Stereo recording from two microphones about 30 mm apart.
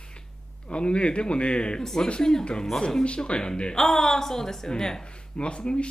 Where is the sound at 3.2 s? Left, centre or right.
Left.